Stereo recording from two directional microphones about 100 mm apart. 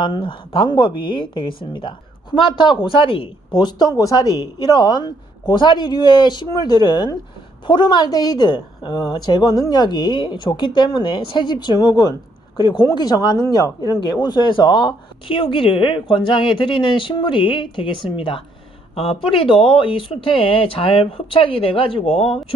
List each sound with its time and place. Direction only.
0.0 s a woman's voice: 55° left (ahead or behind); by 22.4 s 70° left (ahead or behind)